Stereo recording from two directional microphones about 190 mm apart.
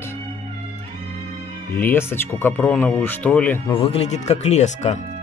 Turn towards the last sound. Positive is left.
turn(degrees=35)  # may be behind; listen again after turning